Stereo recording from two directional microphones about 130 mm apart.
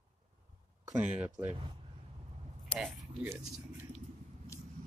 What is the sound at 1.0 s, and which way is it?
Speech, 10° right (ahead or behind).